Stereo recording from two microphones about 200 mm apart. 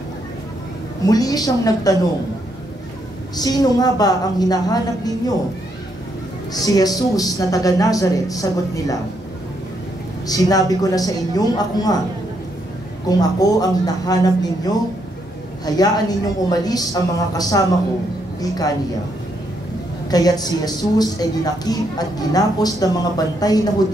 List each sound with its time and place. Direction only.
1.0 s speech: 20° left (ahead or behind)
3.3 s a woman's voice: 20° left (ahead or behind)
6.5 s speech: 20° left (ahead or behind)
10.2 s a woman's voice: 20° left (ahead or behind)
13.2 s a woman's voice: 20° left (ahead or behind)
20.1 s a woman's voice: 20° left (ahead or behind)